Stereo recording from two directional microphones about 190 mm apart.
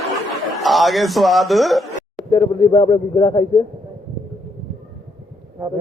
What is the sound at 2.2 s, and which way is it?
Speech, 20° left (ahead or behind).